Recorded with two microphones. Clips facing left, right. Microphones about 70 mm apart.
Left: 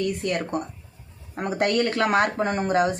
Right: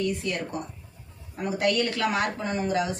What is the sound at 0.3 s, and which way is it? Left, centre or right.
Speech, left.